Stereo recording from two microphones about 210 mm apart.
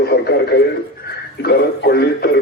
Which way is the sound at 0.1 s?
50° left (ahead or behind).